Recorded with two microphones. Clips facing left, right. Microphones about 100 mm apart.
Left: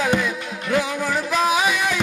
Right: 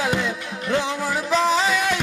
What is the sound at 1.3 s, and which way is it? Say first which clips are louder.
Music: right 1 dB; 15° left (ahead or behind).